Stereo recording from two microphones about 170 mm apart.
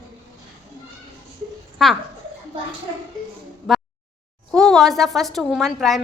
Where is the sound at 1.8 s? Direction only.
Centre (ahead or behind).